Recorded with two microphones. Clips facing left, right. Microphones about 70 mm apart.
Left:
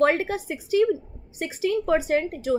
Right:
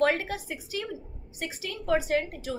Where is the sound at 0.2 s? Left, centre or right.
Left.